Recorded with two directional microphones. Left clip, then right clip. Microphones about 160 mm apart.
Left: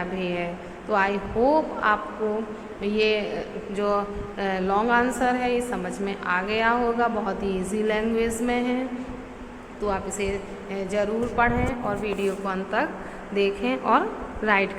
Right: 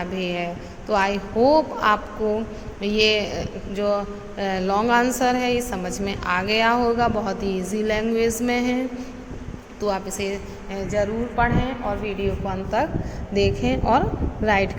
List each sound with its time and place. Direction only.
0.0 s a woman's voice: 35° right (ahead or behind)
3.8 s a woman's voice: 25° right (ahead or behind)
9.8 s a woman's voice: 30° right (ahead or behind)
13.3 s a woman's voice: 45° right (ahead or behind)